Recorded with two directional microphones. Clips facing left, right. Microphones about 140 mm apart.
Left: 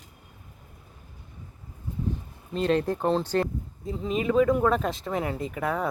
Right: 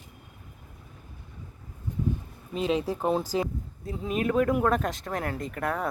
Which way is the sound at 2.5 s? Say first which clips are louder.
Left 3 dB; 5° right (ahead or behind).